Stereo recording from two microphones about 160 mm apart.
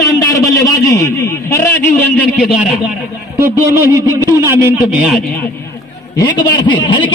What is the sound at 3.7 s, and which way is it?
Speech, 15° right (ahead or behind).